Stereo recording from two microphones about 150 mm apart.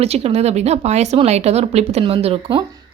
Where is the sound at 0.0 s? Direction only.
45° right (ahead or behind).